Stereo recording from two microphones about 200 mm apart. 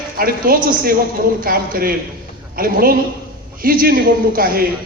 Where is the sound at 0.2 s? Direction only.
45° right (ahead or behind).